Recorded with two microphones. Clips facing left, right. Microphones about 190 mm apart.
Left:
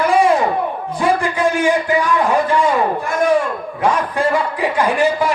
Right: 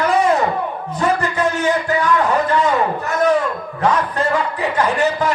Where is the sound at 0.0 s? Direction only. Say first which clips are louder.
Left 2 dB; 10° left (ahead or behind).